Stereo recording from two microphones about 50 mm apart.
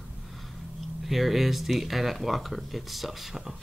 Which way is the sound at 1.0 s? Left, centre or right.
Centre.